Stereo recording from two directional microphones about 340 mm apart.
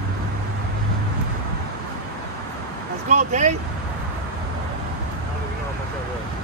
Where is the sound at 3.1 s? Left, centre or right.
Right.